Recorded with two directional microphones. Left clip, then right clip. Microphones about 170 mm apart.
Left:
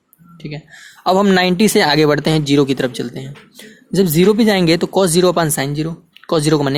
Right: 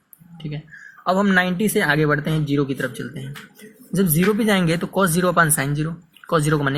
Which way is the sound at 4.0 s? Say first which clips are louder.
Left 7 dB; 35° left (ahead or behind).